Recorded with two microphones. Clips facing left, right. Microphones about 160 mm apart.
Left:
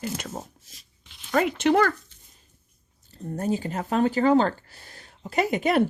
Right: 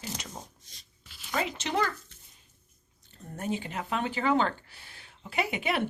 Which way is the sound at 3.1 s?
35° left (ahead or behind).